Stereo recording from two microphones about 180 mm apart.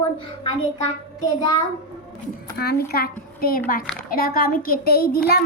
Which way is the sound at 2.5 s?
60° left (ahead or behind).